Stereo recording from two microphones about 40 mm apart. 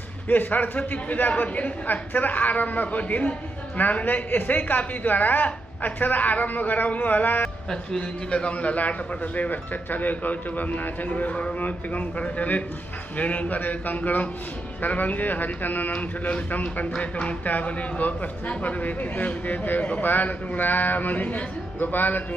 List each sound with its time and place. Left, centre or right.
0.3 s a man's voice: left
8.3 s a man's voice: left